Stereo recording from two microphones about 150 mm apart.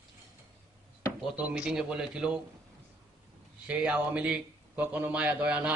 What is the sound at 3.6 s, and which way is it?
A man's voice, 10° right (ahead or behind).